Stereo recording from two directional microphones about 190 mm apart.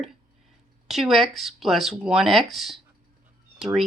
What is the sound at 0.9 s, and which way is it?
Speech, centre (ahead or behind).